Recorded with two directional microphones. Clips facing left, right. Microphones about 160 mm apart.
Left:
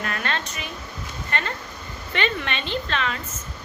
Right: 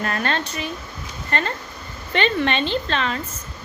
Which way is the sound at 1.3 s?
35° right (ahead or behind).